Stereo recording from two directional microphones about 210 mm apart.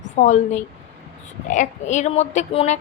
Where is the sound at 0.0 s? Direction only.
35° left (ahead or behind).